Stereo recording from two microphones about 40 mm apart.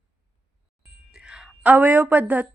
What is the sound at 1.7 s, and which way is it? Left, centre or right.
Speech, right.